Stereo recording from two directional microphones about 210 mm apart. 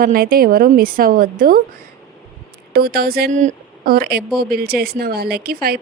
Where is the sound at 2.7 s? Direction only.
45° right (ahead or behind).